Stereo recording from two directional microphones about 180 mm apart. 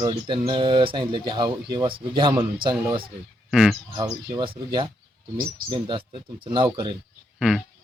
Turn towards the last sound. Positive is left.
turn(degrees=0)  # may be behind; listen again after turning